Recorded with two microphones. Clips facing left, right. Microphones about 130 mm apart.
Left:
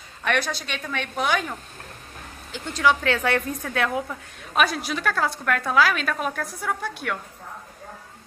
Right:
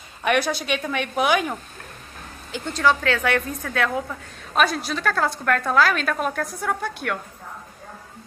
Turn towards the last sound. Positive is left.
turn(degrees=0)  # may be behind; listen again after turning